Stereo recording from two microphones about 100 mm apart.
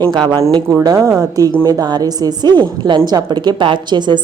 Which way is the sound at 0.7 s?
40° right (ahead or behind).